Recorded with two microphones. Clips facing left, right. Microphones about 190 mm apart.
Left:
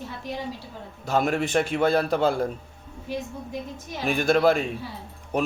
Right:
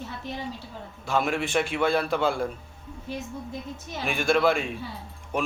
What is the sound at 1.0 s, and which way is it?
Speech, 40° left (ahead or behind).